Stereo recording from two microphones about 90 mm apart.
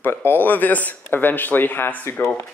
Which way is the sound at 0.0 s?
25° left (ahead or behind).